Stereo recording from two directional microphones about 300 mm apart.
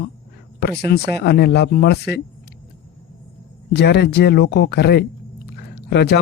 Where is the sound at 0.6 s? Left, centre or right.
Left.